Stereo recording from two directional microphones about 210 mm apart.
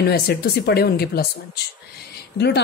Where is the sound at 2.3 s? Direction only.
55° left (ahead or behind).